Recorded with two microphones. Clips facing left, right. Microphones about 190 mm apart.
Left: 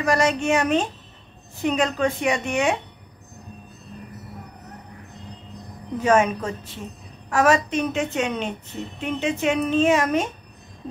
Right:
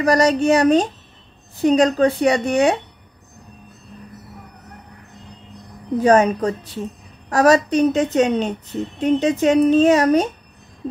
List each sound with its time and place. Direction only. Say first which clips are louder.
0.0 s a woman's voice: right 5 dB; 35° right (ahead or behind)
5.9 s a woman's voice: right 5 dB; 35° right (ahead or behind)